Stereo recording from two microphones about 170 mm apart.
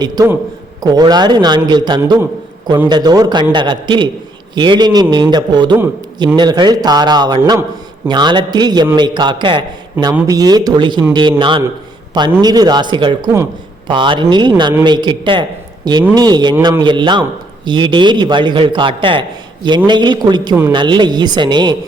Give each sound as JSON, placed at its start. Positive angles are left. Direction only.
{"t": 0.2, "sound": "a man's voice", "side_deg": -20}